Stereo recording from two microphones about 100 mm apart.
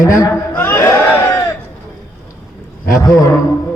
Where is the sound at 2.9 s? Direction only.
30° left (ahead or behind).